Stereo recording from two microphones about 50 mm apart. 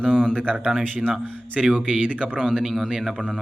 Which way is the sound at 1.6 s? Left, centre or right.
Right.